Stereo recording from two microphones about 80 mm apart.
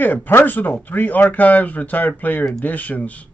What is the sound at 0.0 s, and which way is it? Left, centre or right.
Speech, left.